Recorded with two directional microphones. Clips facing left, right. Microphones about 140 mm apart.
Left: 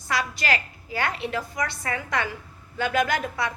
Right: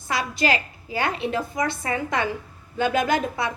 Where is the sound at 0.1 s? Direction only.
20° right (ahead or behind).